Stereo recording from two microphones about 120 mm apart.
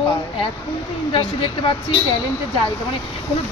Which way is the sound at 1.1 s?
50° left (ahead or behind).